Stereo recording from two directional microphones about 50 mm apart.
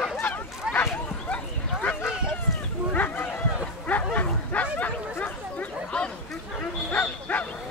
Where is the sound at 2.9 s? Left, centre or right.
Left.